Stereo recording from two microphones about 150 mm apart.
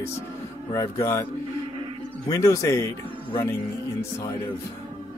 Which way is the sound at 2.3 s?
20° left (ahead or behind).